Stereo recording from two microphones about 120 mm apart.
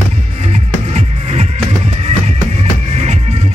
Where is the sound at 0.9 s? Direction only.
65° right (ahead or behind).